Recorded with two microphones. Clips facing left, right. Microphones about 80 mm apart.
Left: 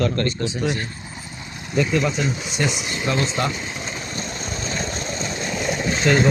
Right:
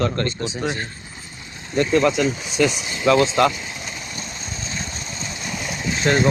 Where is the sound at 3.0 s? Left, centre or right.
Right.